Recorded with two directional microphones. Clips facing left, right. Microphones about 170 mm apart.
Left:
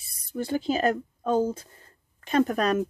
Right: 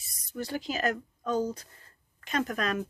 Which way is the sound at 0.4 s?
30° left (ahead or behind).